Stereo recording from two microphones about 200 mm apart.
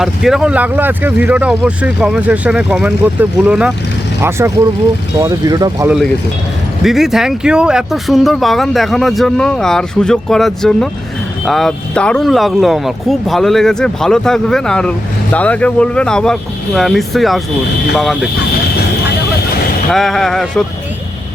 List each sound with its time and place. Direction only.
0.0 s speech: centre (ahead or behind); by 5.9 s 20° right (ahead or behind)
6.8 s speech: centre (ahead or behind)
19.9 s speech: centre (ahead or behind)